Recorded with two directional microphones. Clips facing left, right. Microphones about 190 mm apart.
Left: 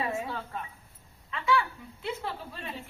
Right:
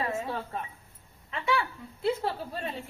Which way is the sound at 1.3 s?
25° right (ahead or behind).